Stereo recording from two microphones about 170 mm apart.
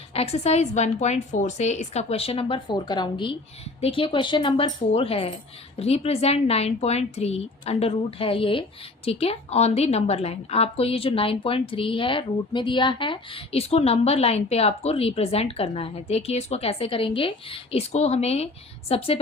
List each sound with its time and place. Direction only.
0.1 s a woman's voice: 35° left (ahead or behind)